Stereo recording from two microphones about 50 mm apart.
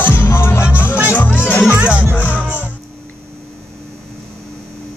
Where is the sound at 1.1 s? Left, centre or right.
Left.